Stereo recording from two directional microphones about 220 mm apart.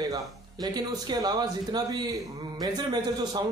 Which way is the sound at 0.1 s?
15° right (ahead or behind).